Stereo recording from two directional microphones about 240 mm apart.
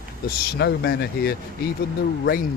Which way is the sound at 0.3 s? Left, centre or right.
Left.